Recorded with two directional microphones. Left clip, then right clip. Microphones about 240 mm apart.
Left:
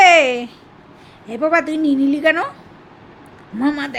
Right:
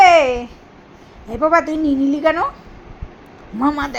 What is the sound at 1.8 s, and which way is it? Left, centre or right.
Speech, centre.